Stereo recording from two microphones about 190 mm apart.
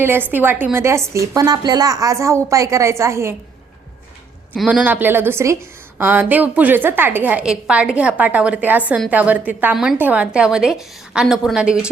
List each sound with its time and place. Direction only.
0.0 s a woman's voice: 10° right (ahead or behind)
4.5 s a woman's voice: 5° right (ahead or behind)